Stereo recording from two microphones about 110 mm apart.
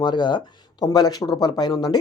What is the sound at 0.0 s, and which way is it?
Speech, 45° left (ahead or behind).